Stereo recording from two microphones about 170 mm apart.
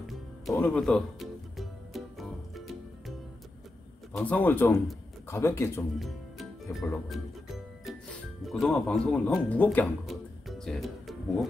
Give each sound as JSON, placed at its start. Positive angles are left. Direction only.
{"t": 0.5, "sound": "music", "side_deg": 10}
{"t": 4.2, "sound": "a man's voice", "side_deg": 10}
{"t": 5.9, "sound": "music", "side_deg": 0}
{"t": 7.1, "sound": "speech", "side_deg": 0}